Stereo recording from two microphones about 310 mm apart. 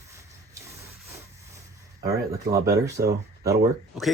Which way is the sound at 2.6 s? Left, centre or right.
Centre.